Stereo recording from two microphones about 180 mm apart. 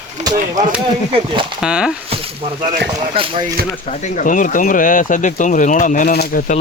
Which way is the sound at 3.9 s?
40° left (ahead or behind).